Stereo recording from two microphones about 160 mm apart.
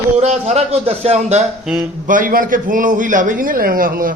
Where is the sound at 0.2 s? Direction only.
45° right (ahead or behind).